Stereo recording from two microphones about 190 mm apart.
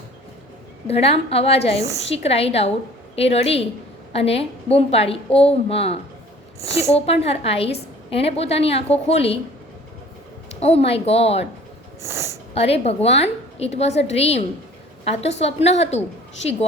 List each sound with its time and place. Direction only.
0.9 s a woman's voice: 30° left (ahead or behind)
10.6 s a woman's voice: 35° left (ahead or behind)
12.0 s speech: 15° right (ahead or behind)
12.5 s a woman's voice: 30° left (ahead or behind)